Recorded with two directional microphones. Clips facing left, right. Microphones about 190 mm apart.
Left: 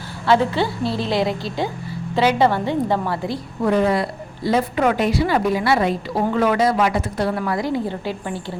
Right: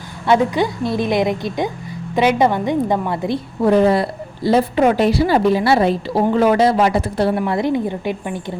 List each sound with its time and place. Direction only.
0.3 s a woman's voice: 15° right (ahead or behind)